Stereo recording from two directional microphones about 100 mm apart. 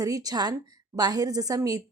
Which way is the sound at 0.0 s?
40° right (ahead or behind).